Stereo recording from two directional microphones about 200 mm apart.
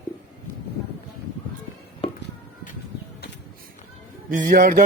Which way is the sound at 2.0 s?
30° left (ahead or behind).